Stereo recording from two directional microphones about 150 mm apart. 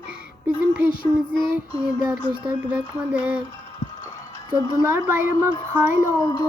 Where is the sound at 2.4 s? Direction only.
10° right (ahead or behind).